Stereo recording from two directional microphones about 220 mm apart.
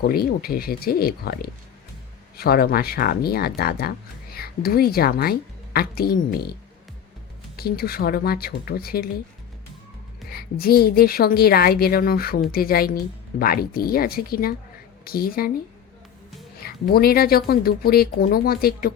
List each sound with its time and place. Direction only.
0.0 s speech: 45° left (ahead or behind)
10.2 s speech: 45° left (ahead or behind)
16.6 s speech: 45° left (ahead or behind)